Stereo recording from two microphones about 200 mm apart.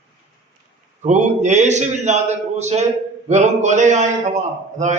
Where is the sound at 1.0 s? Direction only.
35° right (ahead or behind).